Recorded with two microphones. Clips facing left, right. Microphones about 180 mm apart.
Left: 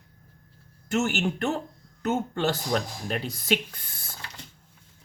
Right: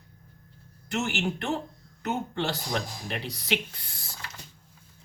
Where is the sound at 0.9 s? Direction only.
45° left (ahead or behind).